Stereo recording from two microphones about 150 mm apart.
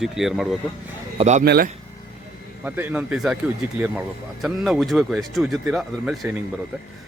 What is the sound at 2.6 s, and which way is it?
Speech, 10° right (ahead or behind).